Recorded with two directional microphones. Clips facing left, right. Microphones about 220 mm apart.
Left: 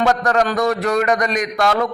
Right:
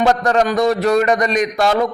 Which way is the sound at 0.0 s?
25° right (ahead or behind).